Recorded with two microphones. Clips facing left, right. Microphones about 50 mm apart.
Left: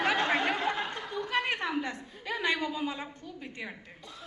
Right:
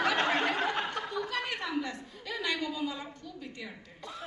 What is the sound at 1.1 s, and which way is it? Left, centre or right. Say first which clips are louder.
Chuckle: left 3 dB; left.